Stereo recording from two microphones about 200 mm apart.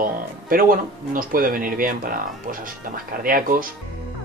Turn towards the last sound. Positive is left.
turn(degrees=-45)  # may be behind; listen again after turning